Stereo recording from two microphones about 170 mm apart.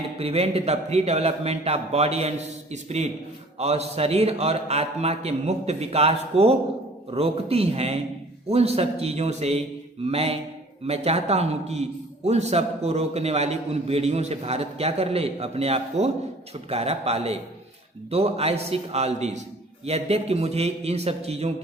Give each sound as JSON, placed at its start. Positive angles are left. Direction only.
{"t": 0.2, "sound": "a man's voice", "side_deg": -35}